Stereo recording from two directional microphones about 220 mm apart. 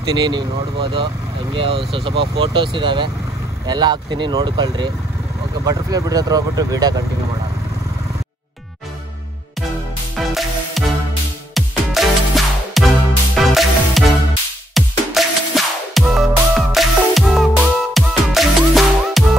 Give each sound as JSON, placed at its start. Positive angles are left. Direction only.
{"t": 0.2, "sound": "speech", "side_deg": -20}
{"t": 10.1, "sound": "music", "side_deg": 0}